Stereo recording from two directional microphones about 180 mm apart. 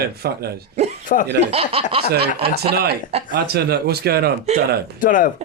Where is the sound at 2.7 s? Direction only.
60° right (ahead or behind).